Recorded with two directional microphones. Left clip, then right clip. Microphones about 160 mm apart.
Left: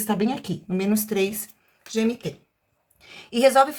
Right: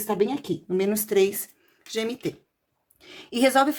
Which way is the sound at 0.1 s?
20° right (ahead or behind).